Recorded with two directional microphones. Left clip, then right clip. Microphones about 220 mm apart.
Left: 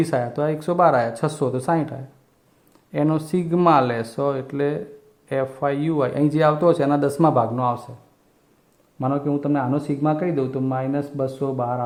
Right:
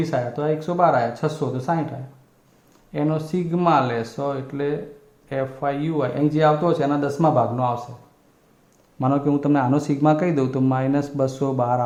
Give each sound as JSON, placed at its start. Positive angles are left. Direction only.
{"t": 0.0, "sound": "speech", "side_deg": 35}
{"t": 2.9, "sound": "speech", "side_deg": 30}
{"t": 9.0, "sound": "a man's voice", "side_deg": 10}